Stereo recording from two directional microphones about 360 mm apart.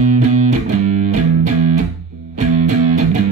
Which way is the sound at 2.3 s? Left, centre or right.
Right.